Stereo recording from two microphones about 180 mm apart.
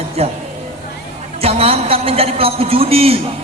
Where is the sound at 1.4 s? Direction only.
35° right (ahead or behind).